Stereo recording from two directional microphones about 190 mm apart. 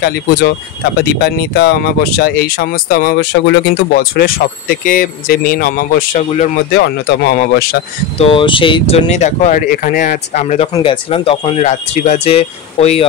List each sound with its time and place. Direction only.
0.0 s speech: 55° left (ahead or behind); by 6.5 s 40° left (ahead or behind)
6.7 s speech: 60° left (ahead or behind)
8.2 s speech: 25° left (ahead or behind)